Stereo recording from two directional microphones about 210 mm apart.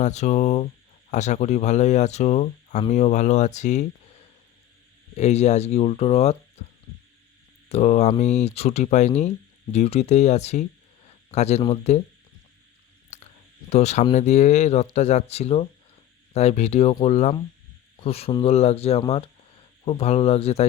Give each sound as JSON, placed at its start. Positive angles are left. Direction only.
{"t": 0.0, "sound": "speech", "side_deg": 35}
{"t": 5.1, "sound": "speech", "side_deg": 30}
{"t": 7.7, "sound": "speech", "side_deg": 30}
{"t": 13.1, "sound": "whispering", "side_deg": 35}
{"t": 13.7, "sound": "speech", "side_deg": 30}